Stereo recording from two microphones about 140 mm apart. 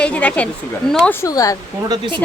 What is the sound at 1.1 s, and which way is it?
Speech, 20° left (ahead or behind).